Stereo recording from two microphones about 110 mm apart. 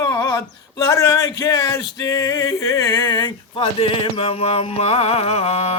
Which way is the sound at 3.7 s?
55° left (ahead or behind).